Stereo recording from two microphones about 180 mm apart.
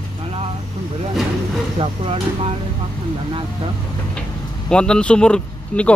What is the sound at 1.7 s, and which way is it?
Speech, 30° right (ahead or behind).